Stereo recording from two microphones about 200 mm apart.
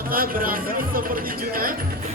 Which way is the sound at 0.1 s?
45° right (ahead or behind).